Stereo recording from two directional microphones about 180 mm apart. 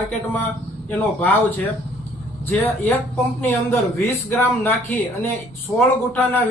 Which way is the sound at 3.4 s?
15° left (ahead or behind).